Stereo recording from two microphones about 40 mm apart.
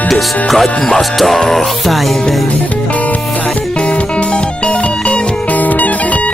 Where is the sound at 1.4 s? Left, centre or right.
Centre.